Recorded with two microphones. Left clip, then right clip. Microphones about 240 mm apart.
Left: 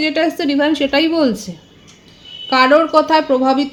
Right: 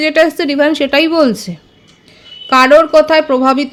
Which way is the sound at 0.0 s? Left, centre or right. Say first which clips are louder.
Right 6 dB; right.